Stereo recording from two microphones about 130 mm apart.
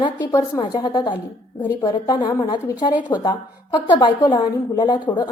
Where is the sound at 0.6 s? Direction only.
35° left (ahead or behind).